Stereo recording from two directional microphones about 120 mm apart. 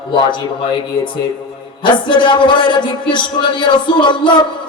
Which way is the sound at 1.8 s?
40° left (ahead or behind).